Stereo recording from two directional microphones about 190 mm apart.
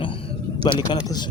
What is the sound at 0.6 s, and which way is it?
Speech, 20° left (ahead or behind).